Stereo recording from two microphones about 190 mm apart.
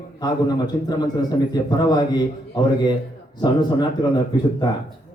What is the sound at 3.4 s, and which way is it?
Speech, 20° left (ahead or behind).